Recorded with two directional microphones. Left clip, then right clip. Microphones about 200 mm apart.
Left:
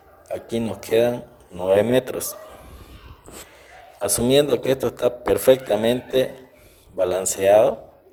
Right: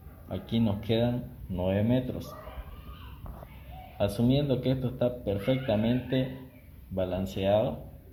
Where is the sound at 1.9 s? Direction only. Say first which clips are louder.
Left 10 dB; 50° left (ahead or behind).